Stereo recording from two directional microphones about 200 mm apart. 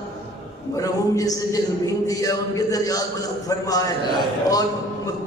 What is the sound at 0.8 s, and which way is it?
A man's voice, 15° left (ahead or behind).